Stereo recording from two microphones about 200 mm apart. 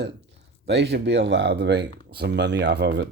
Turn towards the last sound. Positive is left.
turn(degrees=-55)  # may be behind; listen again after turning